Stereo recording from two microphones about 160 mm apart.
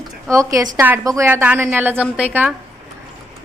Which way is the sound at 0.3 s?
20° right (ahead or behind).